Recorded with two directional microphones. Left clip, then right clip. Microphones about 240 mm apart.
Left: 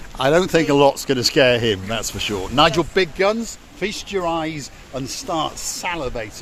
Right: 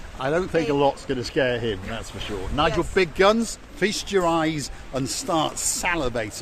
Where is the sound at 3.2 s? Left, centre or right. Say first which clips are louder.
Even; centre.